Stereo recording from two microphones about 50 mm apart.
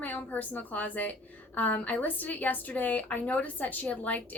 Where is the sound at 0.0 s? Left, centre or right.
Left.